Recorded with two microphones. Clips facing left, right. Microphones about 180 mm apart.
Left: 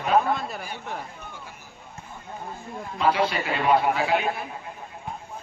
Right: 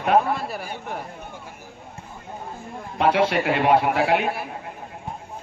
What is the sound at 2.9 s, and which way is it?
A man's voice, 70° right (ahead or behind).